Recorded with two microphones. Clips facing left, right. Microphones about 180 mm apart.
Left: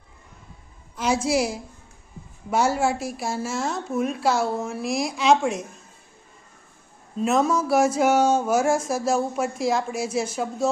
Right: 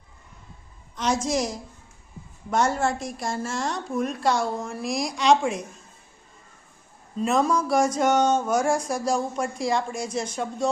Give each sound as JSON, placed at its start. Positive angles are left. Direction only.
{"t": 0.9, "sound": "a woman's voice", "side_deg": 10}
{"t": 7.2, "sound": "speech", "side_deg": 0}